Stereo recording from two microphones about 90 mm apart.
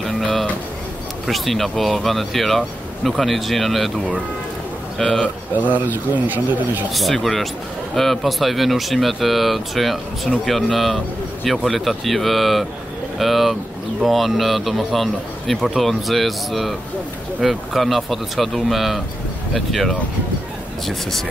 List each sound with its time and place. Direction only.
0.0 s a sound: centre (ahead or behind)
1.2 s a man's voice: centre (ahead or behind)
4.9 s speech: 5° left (ahead or behind)
5.6 s speech: 20° right (ahead or behind)
6.9 s a man's voice: centre (ahead or behind)